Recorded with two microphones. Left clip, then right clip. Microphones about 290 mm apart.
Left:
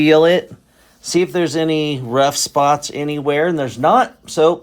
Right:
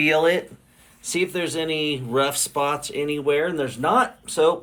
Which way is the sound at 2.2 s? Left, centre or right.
Left.